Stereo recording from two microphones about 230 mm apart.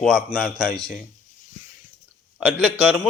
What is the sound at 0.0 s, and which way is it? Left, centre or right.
Speech, centre.